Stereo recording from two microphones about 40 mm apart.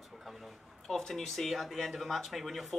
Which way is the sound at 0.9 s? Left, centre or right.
Centre.